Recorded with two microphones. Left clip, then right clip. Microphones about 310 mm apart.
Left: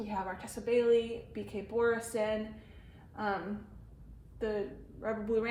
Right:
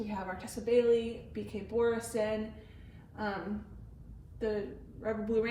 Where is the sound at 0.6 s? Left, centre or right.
Centre.